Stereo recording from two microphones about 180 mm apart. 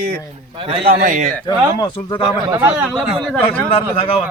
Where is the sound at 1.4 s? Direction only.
25° left (ahead or behind).